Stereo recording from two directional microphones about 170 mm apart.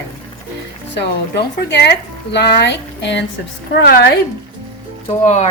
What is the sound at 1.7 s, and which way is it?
A woman's voice, 80° left.